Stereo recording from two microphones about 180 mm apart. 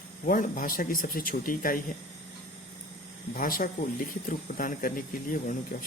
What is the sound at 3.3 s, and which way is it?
Speech, 50° left (ahead or behind).